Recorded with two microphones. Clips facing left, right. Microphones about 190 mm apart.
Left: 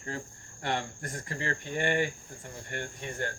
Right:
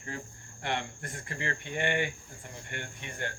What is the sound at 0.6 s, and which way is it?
Speech, 40° left (ahead or behind).